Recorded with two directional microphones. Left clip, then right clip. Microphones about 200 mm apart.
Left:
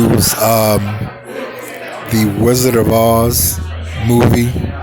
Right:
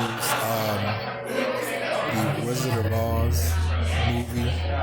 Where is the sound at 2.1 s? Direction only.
50° left (ahead or behind).